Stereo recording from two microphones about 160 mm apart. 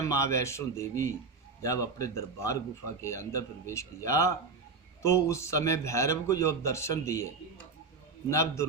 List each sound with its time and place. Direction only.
0.0 s a man's voice: 20° left (ahead or behind)
8.3 s a man's voice: 20° left (ahead or behind)